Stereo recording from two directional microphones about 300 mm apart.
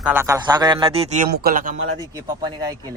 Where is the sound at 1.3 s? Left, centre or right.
Right.